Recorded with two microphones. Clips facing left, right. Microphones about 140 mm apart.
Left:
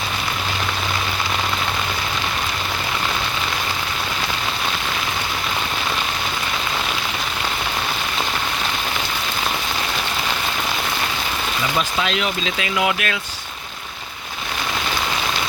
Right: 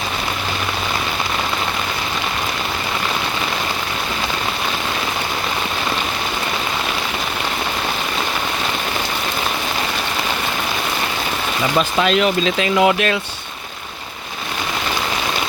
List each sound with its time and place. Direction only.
12.0 s speech: 45° right (ahead or behind)